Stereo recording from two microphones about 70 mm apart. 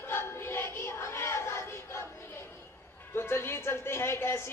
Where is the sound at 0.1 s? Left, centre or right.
Left.